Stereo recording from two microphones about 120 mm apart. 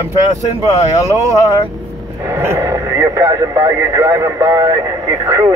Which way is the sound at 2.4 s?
20° right (ahead or behind).